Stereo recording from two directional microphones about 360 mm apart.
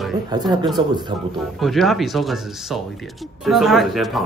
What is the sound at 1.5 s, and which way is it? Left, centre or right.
Speech, centre.